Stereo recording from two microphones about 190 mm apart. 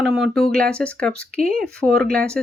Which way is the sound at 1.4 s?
50° right (ahead or behind).